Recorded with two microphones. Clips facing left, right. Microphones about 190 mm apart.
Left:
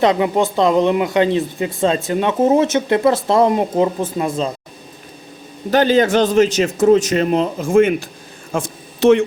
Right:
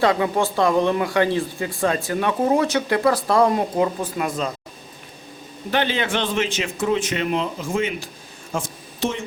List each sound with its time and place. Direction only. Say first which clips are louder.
0.0 s speech: left 4 dB; 20° left (ahead or behind)
5.7 s a man's voice: left 9 dB; 40° left (ahead or behind)
8.5 s speech: left 5 dB; 65° left (ahead or behind)